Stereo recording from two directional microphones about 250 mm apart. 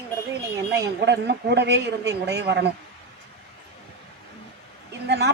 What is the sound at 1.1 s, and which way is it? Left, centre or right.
Speech, right.